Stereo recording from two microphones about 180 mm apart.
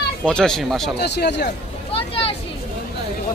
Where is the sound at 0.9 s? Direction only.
65° left (ahead or behind).